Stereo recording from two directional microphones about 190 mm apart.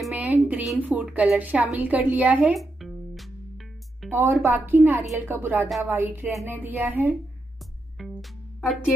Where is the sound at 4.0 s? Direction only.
10° right (ahead or behind).